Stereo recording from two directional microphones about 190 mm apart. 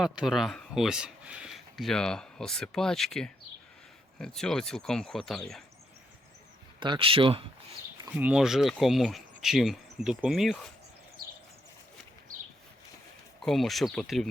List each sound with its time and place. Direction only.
0.0 s speech: centre (ahead or behind)
6.7 s speech: 25° right (ahead or behind)
8.0 s speech: 10° right (ahead or behind)
11.2 s a sound: 50° right (ahead or behind)
13.4 s speech: centre (ahead or behind)